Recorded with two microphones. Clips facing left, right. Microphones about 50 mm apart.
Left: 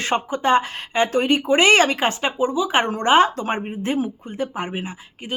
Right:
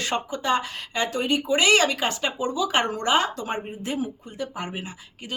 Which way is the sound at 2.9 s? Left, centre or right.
Left.